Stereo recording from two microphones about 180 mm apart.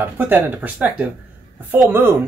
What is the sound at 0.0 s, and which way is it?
Speech, 10° right (ahead or behind).